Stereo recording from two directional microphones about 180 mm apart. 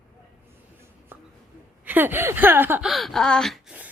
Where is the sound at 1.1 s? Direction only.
10° right (ahead or behind).